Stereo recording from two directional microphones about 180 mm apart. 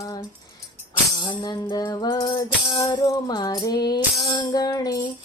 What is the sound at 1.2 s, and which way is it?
Music, 25° left (ahead or behind).